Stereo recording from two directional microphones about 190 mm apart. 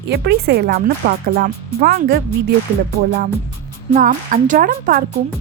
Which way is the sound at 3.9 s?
45° right (ahead or behind).